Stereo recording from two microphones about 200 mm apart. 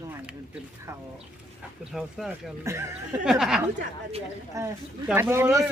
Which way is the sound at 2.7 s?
15° right (ahead or behind).